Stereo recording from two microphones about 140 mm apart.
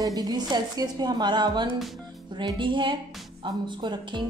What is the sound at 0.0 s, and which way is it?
A woman's voice, 30° right (ahead or behind).